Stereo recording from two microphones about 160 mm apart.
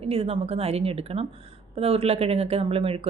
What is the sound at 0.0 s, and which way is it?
Speech, 40° right (ahead or behind).